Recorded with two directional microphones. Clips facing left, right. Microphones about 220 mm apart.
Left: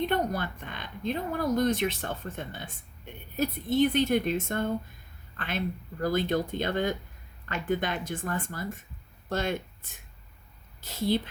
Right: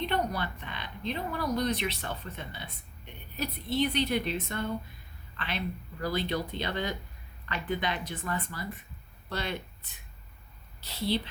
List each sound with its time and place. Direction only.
0.0 s speech: 50° left (ahead or behind)